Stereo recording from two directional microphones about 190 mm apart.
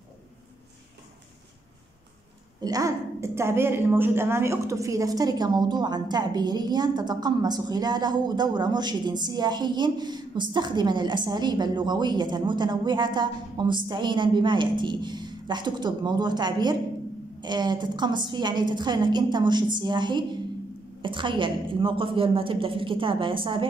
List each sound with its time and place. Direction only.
2.6 s a woman's voice: 20° right (ahead or behind)